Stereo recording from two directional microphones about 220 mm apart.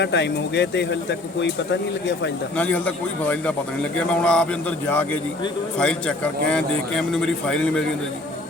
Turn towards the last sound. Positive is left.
turn(degrees=5)  # may be behind; listen again after turning